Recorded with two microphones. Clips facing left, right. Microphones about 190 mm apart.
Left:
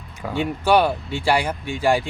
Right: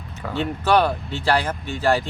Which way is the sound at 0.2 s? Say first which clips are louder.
Left 1 dB; 10° left (ahead or behind).